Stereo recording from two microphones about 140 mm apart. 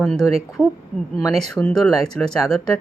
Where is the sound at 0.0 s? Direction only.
Centre (ahead or behind).